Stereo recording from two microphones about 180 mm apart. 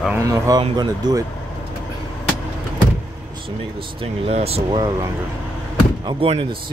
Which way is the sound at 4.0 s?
35° right (ahead or behind).